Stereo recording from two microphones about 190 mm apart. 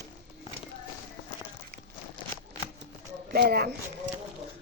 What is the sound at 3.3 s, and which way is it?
Speech, 55° right (ahead or behind).